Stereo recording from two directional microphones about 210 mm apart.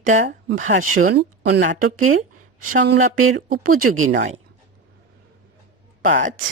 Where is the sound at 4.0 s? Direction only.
70° right (ahead or behind).